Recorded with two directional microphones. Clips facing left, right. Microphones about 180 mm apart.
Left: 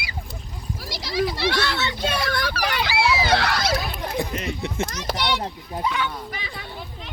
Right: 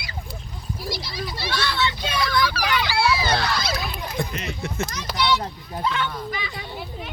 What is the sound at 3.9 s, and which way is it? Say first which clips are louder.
Dog: left 3 dB; 55° left (ahead or behind).